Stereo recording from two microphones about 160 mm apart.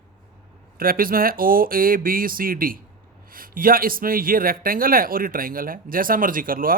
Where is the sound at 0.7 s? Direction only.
65° right (ahead or behind).